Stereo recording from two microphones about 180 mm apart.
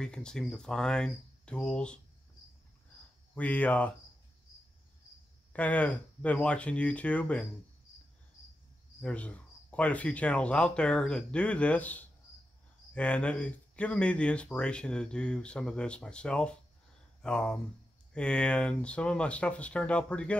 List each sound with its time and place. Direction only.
0.0 s speech: 5° left (ahead or behind)
3.3 s speech: 10° left (ahead or behind)
5.5 s speech: 10° left (ahead or behind)
9.0 s speech: 5° left (ahead or behind)